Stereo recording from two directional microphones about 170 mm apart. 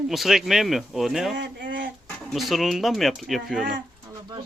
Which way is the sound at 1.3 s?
90° right.